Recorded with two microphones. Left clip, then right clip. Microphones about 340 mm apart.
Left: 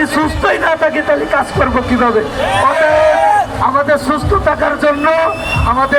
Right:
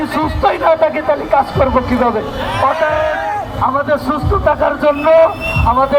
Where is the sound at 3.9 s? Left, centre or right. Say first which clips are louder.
Left 3 dB; centre.